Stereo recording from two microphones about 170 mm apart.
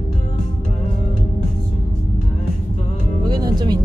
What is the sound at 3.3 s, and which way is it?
Music, 25° right (ahead or behind).